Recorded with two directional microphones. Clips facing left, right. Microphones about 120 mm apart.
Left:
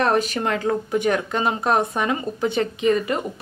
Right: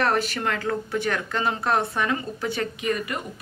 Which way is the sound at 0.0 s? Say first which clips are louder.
Left 3 dB; 20° left (ahead or behind).